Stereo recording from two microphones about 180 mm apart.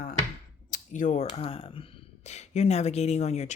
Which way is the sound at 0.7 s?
45° left (ahead or behind).